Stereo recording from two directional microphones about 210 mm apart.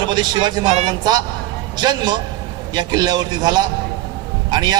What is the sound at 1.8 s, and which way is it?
Speech, 20° right (ahead or behind).